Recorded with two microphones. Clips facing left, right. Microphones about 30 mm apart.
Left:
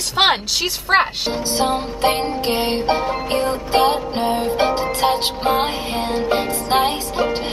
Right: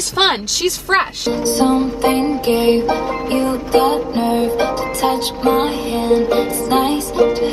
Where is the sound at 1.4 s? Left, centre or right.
Left.